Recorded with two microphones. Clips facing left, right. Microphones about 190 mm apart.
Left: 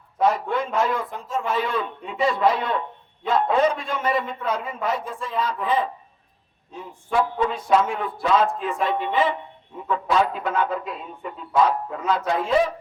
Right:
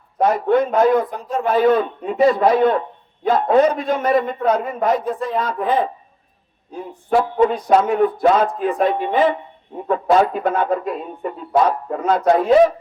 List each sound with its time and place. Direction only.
0.2 s a man's voice: 50° right (ahead or behind)
7.2 s a man's voice: 50° right (ahead or behind)